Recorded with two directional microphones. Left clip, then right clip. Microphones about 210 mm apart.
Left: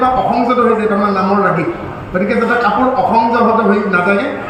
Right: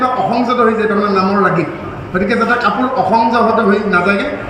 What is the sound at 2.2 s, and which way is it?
A man's voice, 55° right (ahead or behind).